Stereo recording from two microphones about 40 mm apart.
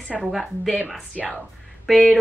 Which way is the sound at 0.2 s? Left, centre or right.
Centre.